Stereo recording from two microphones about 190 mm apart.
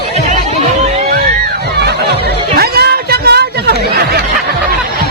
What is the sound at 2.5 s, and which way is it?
Chatter, 55° right (ahead or behind).